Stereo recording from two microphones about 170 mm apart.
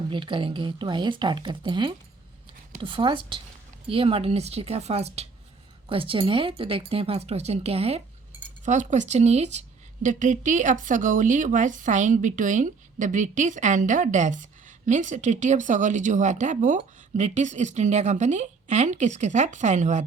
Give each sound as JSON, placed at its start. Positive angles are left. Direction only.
{"t": 0.1, "sound": "speech", "side_deg": -30}